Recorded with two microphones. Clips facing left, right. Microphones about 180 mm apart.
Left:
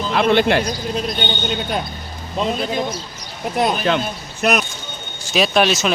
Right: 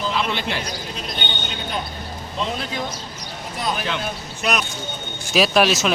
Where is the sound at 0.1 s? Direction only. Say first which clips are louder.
Left 9 dB; 60° left (ahead or behind).